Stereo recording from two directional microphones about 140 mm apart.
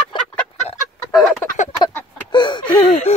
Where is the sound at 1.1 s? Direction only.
Centre (ahead or behind).